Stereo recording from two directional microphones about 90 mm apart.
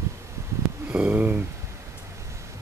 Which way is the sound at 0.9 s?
15° right (ahead or behind).